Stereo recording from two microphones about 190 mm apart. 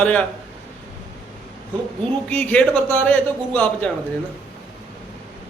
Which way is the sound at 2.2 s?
10° left (ahead or behind).